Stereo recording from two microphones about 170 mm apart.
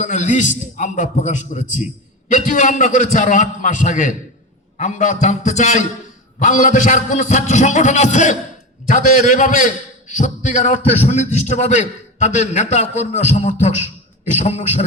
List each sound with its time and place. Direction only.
0.0 s a man's voice: 45° left (ahead or behind)